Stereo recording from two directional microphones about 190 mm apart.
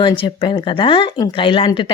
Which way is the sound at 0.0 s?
25° left (ahead or behind).